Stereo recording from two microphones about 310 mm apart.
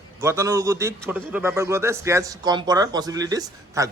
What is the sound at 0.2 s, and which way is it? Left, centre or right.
A man's voice, centre.